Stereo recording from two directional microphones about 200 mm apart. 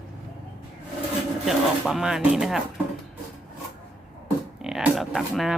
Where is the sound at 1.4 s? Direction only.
Centre (ahead or behind).